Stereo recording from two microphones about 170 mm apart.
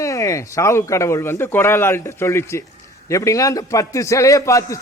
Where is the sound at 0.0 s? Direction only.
20° left (ahead or behind).